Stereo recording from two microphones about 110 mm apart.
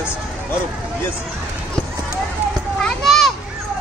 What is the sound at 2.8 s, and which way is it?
Children playing, centre (ahead or behind).